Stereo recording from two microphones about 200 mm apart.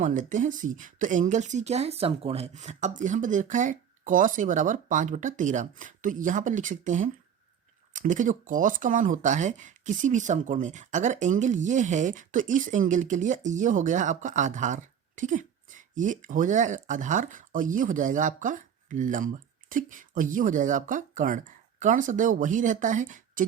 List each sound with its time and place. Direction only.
0.0 s speech: 40° right (ahead or behind)